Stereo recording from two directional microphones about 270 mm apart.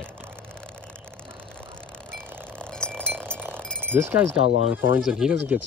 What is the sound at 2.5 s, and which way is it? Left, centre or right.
Chink, centre.